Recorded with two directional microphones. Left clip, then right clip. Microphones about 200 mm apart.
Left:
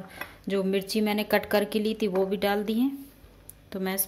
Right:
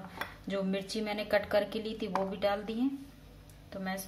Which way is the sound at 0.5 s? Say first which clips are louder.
Left 8 dB; 45° left (ahead or behind).